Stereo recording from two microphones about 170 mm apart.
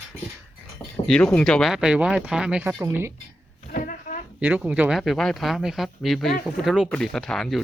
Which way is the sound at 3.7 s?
55° left (ahead or behind).